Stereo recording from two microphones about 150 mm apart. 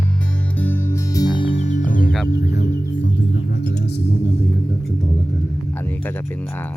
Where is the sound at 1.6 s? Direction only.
60° left (ahead or behind).